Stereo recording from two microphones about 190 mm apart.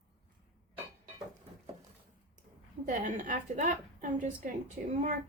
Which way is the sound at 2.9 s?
45° right (ahead or behind).